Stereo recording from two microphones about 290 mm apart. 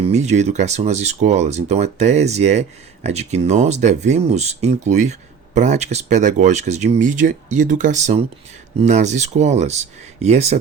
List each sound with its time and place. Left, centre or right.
0.0 s speech: right